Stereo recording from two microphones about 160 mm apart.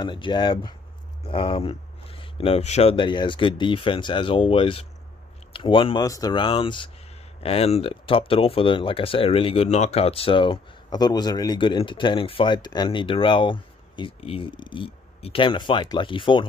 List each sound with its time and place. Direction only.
0.0 s speech: 30° left (ahead or behind)